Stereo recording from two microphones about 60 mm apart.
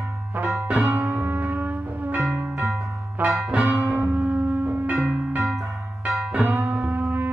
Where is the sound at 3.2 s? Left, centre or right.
Right.